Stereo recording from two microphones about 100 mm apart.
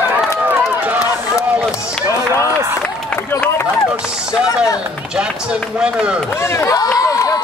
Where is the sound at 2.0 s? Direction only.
30° left (ahead or behind).